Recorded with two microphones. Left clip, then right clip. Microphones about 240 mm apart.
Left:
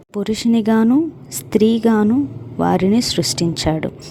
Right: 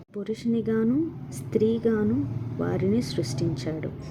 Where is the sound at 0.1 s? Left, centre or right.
Left.